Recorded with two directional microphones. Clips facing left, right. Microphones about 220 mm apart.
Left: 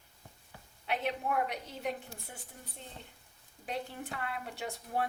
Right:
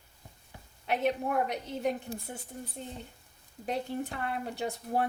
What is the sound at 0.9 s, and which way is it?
A woman's voice, 45° right (ahead or behind).